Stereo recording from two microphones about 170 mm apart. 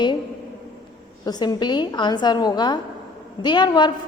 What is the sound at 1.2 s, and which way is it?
A woman's voice, 25° left (ahead or behind).